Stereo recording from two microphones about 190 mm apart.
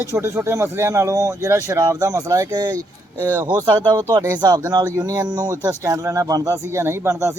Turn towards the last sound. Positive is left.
turn(degrees=-15)  # may be behind; listen again after turning